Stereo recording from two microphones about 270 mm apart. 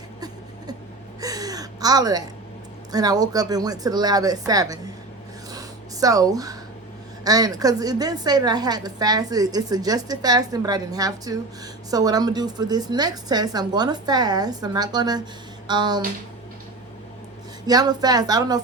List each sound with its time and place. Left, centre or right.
1.2 s gasp: centre
2.9 s a woman's voice: centre
5.5 s a sound: centre
7.3 s a woman's voice: centre
17.7 s a woman's voice: centre